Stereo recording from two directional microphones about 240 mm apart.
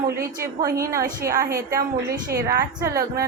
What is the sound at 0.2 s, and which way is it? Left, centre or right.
Speech, centre.